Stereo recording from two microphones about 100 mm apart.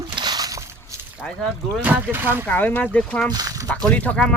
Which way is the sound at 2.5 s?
20° left (ahead or behind).